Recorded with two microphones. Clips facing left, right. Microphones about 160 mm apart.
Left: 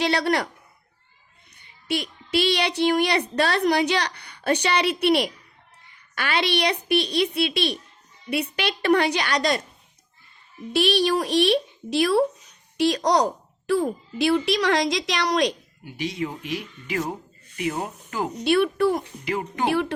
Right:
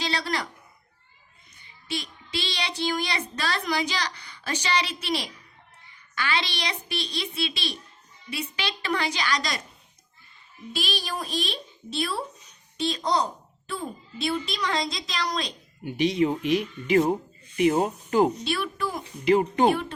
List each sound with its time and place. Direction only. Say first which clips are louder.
0.0 s a woman's voice: left 7 dB; 65° left (ahead or behind)
1.9 s a woman's voice: left 7 dB; 65° left (ahead or behind)
10.7 s a woman's voice: left 11 dB; 65° left (ahead or behind)
15.8 s speech: right 6 dB; 20° right (ahead or behind)
18.4 s a woman's voice: left 10 dB; 60° left (ahead or behind)
19.2 s speech: right 7 dB; 25° right (ahead or behind)